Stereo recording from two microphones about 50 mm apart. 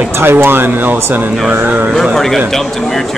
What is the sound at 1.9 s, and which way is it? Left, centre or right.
A man's voice, centre.